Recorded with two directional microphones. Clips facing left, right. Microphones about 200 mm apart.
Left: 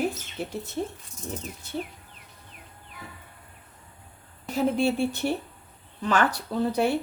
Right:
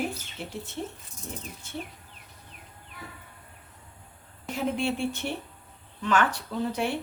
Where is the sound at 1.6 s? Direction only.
35° left (ahead or behind).